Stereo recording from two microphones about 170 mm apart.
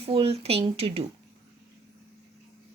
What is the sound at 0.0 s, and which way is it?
Speech, 35° right (ahead or behind).